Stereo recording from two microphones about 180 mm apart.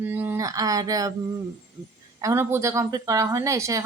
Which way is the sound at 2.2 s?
15° right (ahead or behind).